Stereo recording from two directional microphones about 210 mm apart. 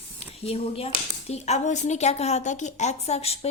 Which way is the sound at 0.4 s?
30° left (ahead or behind).